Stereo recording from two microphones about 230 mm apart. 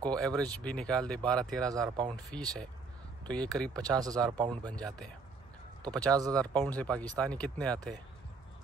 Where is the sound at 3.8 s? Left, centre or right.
Centre.